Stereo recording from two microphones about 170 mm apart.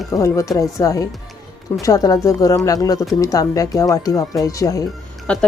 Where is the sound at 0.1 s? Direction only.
20° left (ahead or behind).